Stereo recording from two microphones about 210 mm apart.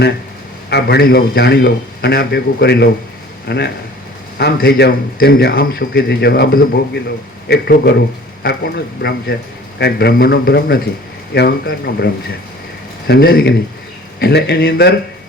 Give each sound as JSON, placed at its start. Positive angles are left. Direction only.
{"t": 0.7, "sound": "a man's voice", "side_deg": 50}